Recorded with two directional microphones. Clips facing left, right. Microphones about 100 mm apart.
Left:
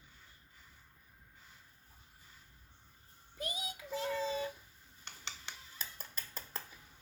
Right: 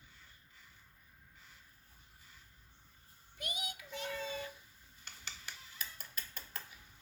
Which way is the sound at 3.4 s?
35° left (ahead or behind).